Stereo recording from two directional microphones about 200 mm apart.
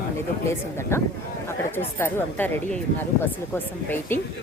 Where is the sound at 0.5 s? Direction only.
15° left (ahead or behind).